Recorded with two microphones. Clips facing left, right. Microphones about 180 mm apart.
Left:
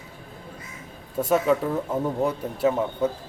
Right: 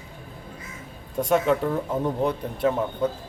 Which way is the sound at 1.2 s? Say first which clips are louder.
Even; 5° left (ahead or behind).